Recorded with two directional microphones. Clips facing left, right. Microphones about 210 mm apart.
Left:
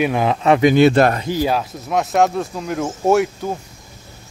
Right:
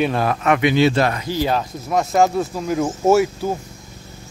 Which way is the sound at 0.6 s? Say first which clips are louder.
Left 5 dB; 50° left (ahead or behind).